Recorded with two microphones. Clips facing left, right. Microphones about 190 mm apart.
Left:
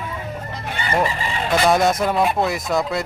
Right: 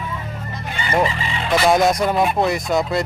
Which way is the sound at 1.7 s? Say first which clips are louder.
Right 1 dB; centre (ahead or behind).